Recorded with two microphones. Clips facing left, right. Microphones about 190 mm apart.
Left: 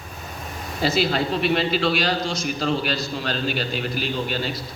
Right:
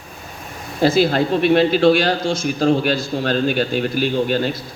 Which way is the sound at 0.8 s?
50° right (ahead or behind).